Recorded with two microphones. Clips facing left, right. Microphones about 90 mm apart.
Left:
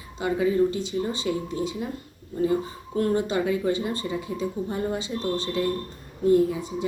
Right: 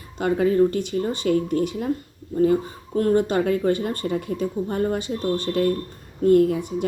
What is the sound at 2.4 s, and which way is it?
A woman's voice, 45° right (ahead or behind).